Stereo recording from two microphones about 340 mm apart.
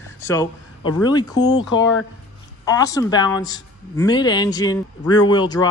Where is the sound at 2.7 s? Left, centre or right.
Centre.